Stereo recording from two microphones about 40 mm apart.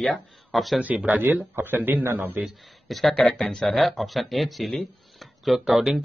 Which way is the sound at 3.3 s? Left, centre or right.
Left.